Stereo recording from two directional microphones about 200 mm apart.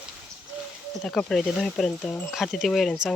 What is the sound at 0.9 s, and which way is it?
Speech, centre (ahead or behind).